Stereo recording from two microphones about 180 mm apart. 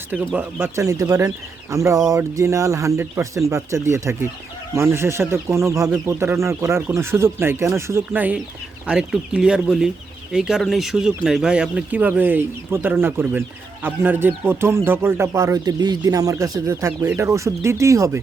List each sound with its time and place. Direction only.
0.3 s speech: 15° right (ahead or behind)